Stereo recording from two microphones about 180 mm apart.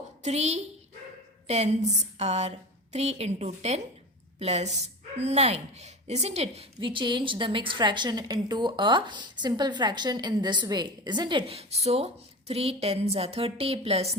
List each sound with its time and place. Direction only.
0.2 s a woman's voice: 35° right (ahead or behind)